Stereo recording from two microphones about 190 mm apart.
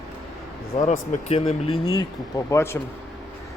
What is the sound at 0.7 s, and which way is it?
Speech, 30° left (ahead or behind).